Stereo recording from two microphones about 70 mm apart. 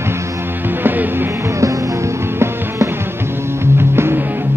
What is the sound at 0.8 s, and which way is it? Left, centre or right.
Music, right.